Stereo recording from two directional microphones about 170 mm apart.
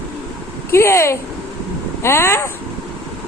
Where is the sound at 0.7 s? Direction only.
15° left (ahead or behind).